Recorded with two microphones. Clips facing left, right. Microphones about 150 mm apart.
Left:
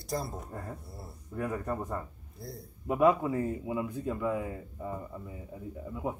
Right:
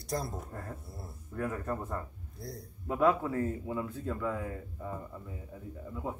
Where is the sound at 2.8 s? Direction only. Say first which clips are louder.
Left 3 dB; 15° left (ahead or behind).